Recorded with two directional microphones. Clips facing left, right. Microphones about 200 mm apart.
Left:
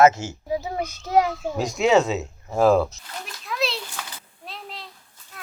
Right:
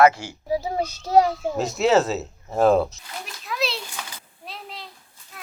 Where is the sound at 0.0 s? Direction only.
25° left (ahead or behind).